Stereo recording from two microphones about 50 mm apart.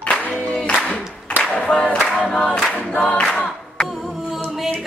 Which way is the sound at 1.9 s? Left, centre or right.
Left.